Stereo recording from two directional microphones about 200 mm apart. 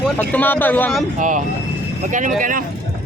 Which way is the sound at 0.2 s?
10° left (ahead or behind).